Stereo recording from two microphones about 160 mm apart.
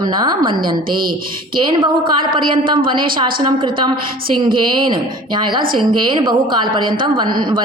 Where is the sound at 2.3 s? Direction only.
30° right (ahead or behind).